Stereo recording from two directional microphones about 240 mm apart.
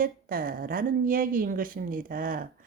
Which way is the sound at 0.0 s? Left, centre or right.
Right.